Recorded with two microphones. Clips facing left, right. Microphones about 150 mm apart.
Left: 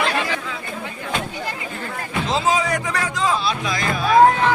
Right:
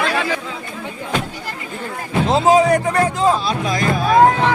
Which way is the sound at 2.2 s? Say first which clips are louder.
Right 8 dB; 50° right (ahead or behind).